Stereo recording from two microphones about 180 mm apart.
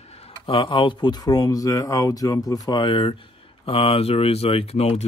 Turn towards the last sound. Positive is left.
turn(degrees=35)  # may be behind; listen again after turning